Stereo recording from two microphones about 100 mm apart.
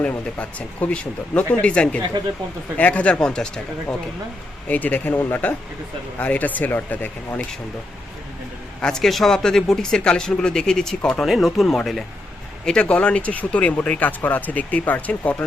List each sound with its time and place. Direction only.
0.0 s speech: 15° left (ahead or behind)
4.7 s speech: 15° left (ahead or behind)
8.8 s speech: 5° left (ahead or behind)